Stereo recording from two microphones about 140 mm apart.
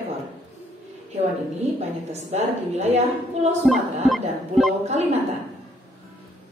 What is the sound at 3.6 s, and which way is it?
Music, centre (ahead or behind).